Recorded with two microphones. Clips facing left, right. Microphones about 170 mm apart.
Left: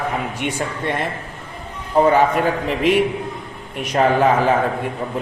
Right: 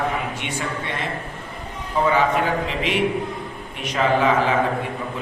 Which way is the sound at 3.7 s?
45° left (ahead or behind).